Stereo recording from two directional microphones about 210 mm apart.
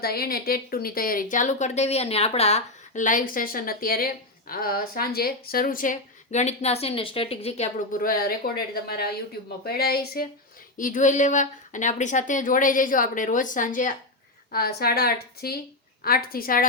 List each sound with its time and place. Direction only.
0.0 s speech: 45° left (ahead or behind)
8.5 s a woman's voice: 45° left (ahead or behind)